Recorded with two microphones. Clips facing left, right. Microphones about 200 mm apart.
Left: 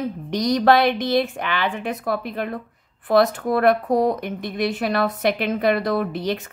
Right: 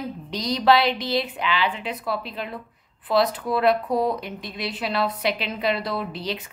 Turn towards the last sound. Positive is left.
turn(degrees=50)  # may be behind; listen again after turning